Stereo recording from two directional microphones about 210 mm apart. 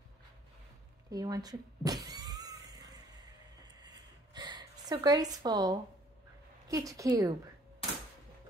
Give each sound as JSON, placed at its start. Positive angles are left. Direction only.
{"t": 1.1, "sound": "speech", "side_deg": -15}
{"t": 2.2, "sound": "a sound", "side_deg": -15}
{"t": 6.7, "sound": "speech", "side_deg": -15}